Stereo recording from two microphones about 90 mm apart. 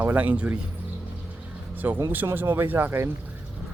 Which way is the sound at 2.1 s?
20° right (ahead or behind).